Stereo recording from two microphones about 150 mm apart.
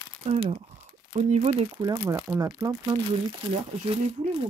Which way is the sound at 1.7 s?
20° right (ahead or behind).